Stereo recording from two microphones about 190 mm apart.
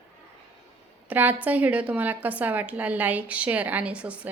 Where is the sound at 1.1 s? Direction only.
10° right (ahead or behind).